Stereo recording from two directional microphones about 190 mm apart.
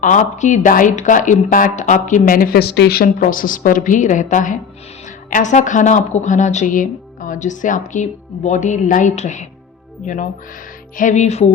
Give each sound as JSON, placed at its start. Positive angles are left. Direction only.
{"t": 0.0, "sound": "speech", "side_deg": 40}